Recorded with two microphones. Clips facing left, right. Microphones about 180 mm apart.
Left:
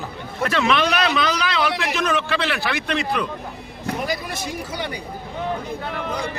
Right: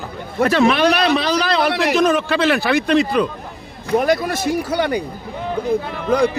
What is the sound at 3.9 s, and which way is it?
Speech, 70° right (ahead or behind).